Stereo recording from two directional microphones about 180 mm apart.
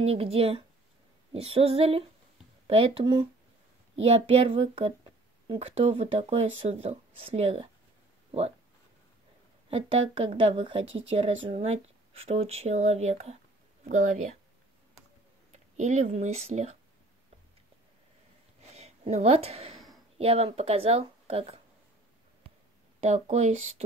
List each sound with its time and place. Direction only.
0.0 s speech: 35° right (ahead or behind)
9.7 s speech: 35° right (ahead or behind)
15.5 s speech: 40° right (ahead or behind)
18.6 s a sound: 40° right (ahead or behind)
20.2 s speech: 35° right (ahead or behind)
22.9 s speech: 35° right (ahead or behind)